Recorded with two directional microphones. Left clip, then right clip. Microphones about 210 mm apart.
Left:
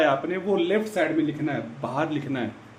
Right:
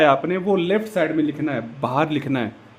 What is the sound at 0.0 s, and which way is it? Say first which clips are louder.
A man's voice: right 6 dB; 55° right (ahead or behind).